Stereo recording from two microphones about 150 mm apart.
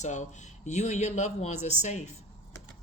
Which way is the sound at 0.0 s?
50° left (ahead or behind).